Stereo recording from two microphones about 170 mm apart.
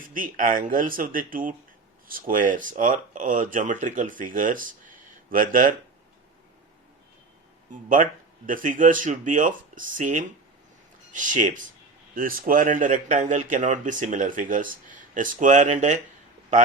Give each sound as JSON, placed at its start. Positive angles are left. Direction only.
{"t": 0.0, "sound": "a man's voice", "side_deg": -55}
{"t": 7.7, "sound": "a man's voice", "side_deg": -50}